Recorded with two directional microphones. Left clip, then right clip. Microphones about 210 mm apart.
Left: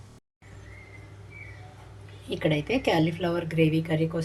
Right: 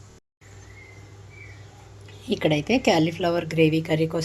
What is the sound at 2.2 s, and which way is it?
A woman's voice, 35° right (ahead or behind).